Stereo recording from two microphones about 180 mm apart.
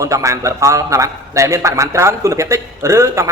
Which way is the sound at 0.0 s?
15° right (ahead or behind).